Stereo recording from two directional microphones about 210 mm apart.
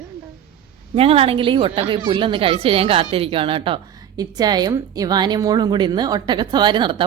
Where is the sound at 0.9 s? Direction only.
30° right (ahead or behind).